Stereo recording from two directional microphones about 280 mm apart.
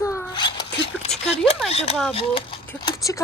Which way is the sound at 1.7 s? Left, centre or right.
Left.